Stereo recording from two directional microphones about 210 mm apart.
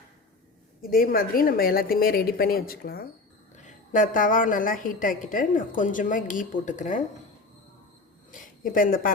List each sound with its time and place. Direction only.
0.8 s a woman's voice: 45° left (ahead or behind)
8.3 s a woman's voice: 40° left (ahead or behind)